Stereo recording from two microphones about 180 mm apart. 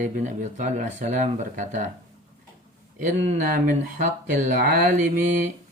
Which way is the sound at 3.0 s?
45° right (ahead or behind).